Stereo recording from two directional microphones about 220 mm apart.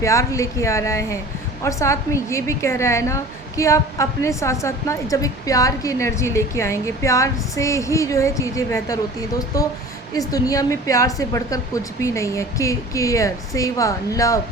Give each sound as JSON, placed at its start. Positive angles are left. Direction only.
{"t": 0.0, "sound": "a woman's voice", "side_deg": 15}